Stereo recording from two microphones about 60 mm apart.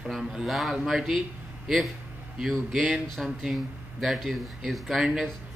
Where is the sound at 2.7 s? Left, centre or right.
Centre.